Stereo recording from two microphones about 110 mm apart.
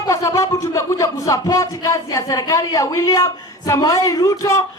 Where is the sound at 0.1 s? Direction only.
25° left (ahead or behind).